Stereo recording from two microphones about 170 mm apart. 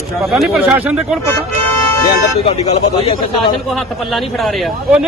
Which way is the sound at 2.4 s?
40° left (ahead or behind).